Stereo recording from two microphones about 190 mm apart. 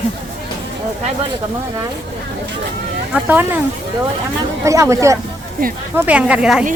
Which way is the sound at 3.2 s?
10° right (ahead or behind).